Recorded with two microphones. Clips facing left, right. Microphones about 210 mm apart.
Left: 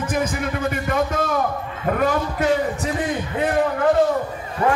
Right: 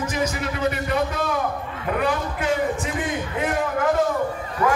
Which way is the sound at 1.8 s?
45° left (ahead or behind).